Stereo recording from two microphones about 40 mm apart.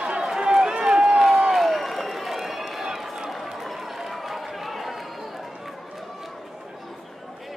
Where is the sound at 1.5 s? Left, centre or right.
Centre.